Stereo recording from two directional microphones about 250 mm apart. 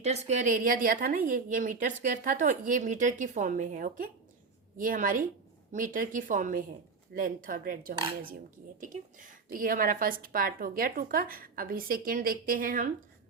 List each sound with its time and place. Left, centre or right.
0.0 s a woman's voice: right